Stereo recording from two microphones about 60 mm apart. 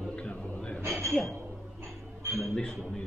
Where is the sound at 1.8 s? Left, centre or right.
Right.